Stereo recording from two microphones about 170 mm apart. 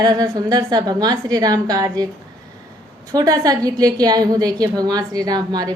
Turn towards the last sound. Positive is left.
turn(degrees=-25)  # may be behind; listen again after turning